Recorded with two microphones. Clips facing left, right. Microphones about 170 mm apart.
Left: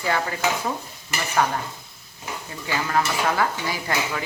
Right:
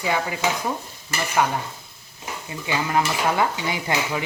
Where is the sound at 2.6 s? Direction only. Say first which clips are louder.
Right 1 dB; 15° right (ahead or behind).